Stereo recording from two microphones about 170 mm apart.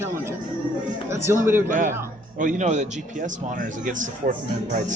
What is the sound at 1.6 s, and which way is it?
A man's voice, 50° right (ahead or behind).